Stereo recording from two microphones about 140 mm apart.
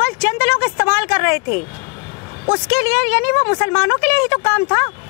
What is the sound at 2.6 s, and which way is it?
Speech, 10° left (ahead or behind).